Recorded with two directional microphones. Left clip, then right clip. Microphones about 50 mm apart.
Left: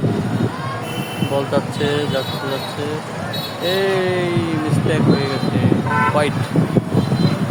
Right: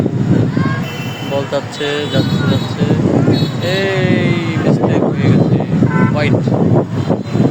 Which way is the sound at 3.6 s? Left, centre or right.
Centre.